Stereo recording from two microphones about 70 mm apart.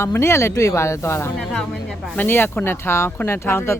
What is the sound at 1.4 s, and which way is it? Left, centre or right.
Speech, centre.